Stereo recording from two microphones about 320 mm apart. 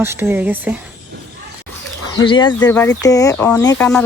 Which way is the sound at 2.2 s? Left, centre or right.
Centre.